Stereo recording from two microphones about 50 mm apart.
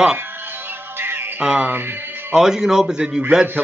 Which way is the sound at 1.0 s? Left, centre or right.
Right.